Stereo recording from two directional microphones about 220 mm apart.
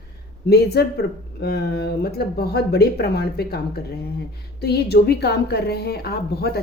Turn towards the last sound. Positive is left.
turn(degrees=45)  # may be behind; listen again after turning